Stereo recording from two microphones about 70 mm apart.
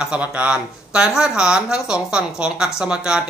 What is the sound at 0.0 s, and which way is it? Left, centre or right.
Speech, centre.